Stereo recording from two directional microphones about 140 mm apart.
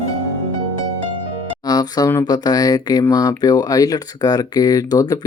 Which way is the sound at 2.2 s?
30° left (ahead or behind).